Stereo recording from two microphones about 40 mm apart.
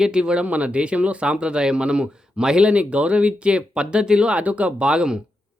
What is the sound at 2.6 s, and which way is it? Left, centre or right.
Speech, right.